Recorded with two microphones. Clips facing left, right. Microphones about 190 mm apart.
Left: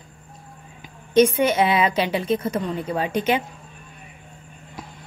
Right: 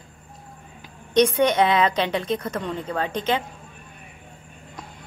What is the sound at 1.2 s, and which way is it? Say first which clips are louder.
Speech: left 1 dB; 5° left (ahead or behind).